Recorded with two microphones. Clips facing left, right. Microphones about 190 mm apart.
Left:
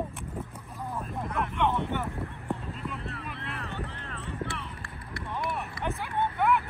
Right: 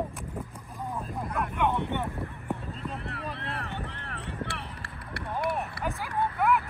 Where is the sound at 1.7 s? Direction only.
20° right (ahead or behind).